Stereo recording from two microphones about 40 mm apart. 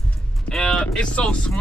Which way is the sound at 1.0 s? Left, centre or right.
Left.